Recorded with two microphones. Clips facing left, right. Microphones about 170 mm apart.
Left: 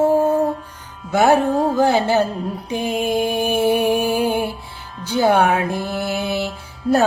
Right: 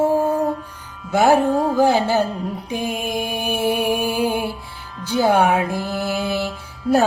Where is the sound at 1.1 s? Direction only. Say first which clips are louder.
Even; 10° right (ahead or behind).